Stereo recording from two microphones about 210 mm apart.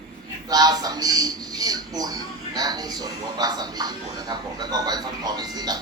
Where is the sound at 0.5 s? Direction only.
20° right (ahead or behind).